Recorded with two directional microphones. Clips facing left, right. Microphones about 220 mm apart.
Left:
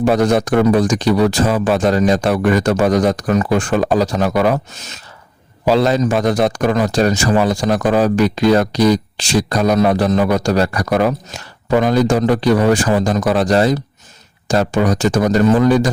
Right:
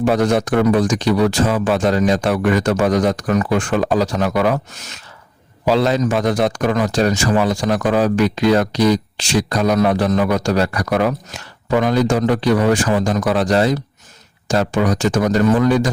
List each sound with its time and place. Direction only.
0.0 s speech: 40° left (ahead or behind)
5.6 s speech: 40° left (ahead or behind)